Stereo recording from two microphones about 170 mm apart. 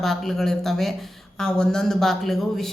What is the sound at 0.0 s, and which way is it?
Speech, centre (ahead or behind).